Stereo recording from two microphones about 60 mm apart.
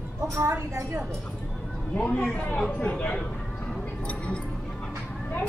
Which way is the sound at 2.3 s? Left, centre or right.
Left.